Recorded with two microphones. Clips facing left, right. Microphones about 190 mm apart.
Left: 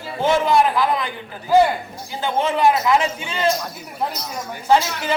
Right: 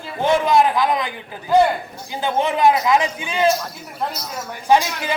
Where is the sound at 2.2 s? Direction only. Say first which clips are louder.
Right 1 dB; 20° right (ahead or behind).